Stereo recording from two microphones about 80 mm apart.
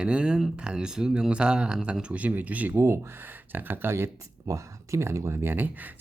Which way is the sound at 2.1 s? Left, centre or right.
Centre.